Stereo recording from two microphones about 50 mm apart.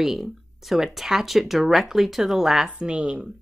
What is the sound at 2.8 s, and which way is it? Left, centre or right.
Speech, right.